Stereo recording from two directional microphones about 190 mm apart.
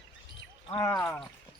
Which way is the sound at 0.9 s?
5° left (ahead or behind).